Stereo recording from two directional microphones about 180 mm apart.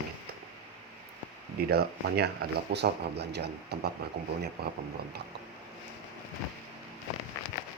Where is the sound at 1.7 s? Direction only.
60° right (ahead or behind).